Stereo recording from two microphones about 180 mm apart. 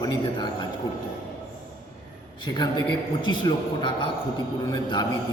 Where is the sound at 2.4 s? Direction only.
25° left (ahead or behind).